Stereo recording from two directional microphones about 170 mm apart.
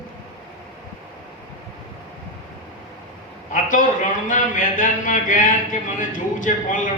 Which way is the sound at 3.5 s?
50° left (ahead or behind).